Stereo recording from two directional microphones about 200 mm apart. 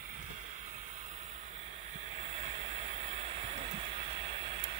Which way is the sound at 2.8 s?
30° right (ahead or behind).